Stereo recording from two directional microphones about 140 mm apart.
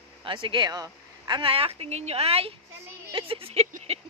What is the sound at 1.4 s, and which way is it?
Speech, 40° right (ahead or behind).